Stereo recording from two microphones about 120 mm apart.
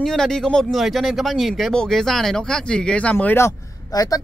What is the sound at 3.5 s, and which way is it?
Speech, 30° left (ahead or behind).